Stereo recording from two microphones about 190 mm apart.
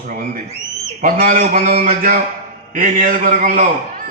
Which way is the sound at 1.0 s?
45° right (ahead or behind).